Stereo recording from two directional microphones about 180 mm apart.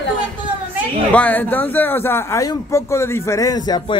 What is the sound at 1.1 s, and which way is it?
A man's voice, 10° left (ahead or behind).